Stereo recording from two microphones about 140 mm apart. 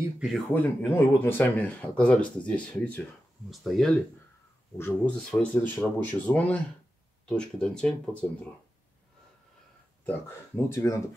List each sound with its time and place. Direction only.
0.5 s speech: 15° left (ahead or behind)
4.7 s speech: 10° left (ahead or behind)
10.0 s speech: 15° left (ahead or behind)